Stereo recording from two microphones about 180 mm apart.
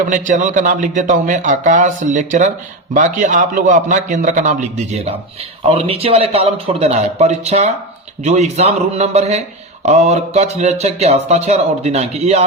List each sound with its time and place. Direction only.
0.1 s a man's voice: 45° right (ahead or behind)